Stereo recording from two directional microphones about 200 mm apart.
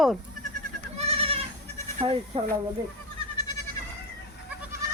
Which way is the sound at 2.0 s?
30° right (ahead or behind).